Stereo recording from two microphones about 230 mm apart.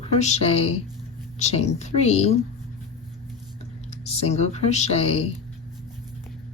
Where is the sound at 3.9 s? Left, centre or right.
Left.